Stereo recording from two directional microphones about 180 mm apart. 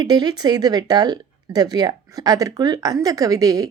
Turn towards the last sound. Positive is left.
turn(degrees=-20)  # may be behind; listen again after turning